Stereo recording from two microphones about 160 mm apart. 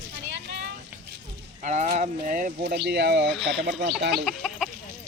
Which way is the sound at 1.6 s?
45° right (ahead or behind).